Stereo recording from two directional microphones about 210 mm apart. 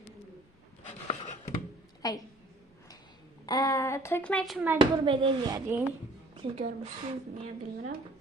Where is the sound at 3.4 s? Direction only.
20° left (ahead or behind); by 4.8 s 5° right (ahead or behind).